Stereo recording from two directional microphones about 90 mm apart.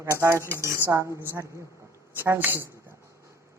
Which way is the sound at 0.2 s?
30° right (ahead or behind).